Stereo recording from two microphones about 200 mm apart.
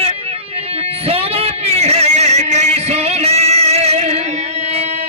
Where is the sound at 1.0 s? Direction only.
30° right (ahead or behind).